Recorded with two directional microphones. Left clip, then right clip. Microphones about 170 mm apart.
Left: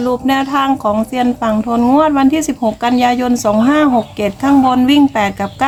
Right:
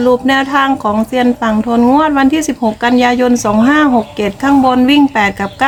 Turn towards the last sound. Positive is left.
turn(degrees=0)  # may be behind; listen again after turning